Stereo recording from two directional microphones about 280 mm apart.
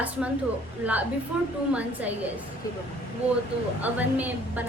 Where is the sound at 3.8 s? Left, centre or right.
Centre.